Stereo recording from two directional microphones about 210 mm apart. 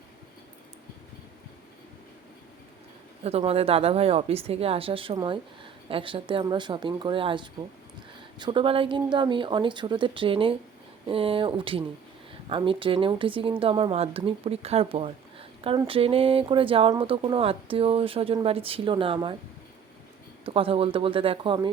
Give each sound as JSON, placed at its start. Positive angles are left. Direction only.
{"t": 3.2, "sound": "a woman's voice", "side_deg": -30}
{"t": 20.4, "sound": "a woman's voice", "side_deg": -25}